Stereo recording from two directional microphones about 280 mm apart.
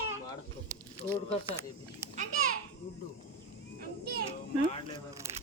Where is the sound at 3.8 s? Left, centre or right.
Right.